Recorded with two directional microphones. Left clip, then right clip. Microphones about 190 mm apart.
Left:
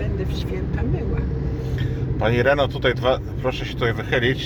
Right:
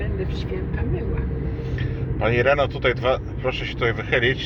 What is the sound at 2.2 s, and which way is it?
Speech, 20° left (ahead or behind).